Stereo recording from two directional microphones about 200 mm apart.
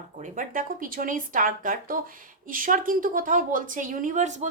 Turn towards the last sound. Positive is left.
turn(degrees=-35)  # may be behind; listen again after turning